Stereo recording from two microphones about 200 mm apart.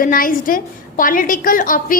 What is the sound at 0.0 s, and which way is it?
A woman's voice, 45° left (ahead or behind).